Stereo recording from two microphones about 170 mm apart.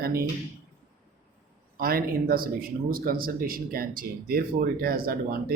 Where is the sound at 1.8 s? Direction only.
60° right (ahead or behind).